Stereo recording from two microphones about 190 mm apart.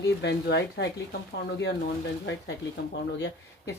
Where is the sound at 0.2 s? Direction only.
60° left (ahead or behind).